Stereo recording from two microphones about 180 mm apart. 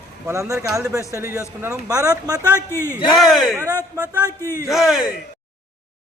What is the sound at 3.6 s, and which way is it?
Speech, 20° right (ahead or behind).